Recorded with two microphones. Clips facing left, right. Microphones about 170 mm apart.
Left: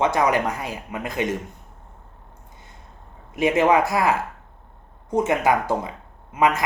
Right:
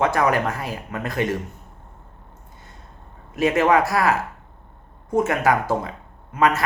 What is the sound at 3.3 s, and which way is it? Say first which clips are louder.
Speech: even; 20° left (ahead or behind).